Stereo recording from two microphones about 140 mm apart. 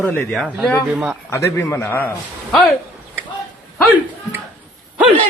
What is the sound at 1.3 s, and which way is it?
Speech, 20° left (ahead or behind).